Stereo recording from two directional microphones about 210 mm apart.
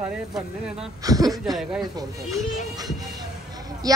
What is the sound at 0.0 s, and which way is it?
Speech, 5° right (ahead or behind).